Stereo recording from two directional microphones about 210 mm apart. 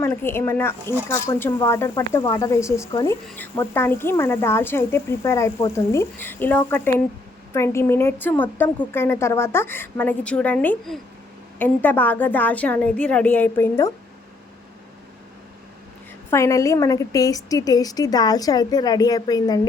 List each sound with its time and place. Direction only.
0.0 s a woman's voice: 10° left (ahead or behind)
16.3 s a woman's voice: 15° left (ahead or behind)